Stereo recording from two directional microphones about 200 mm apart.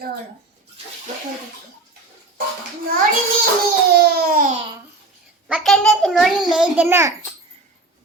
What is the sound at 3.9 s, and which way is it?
Babbling, 50° right (ahead or behind).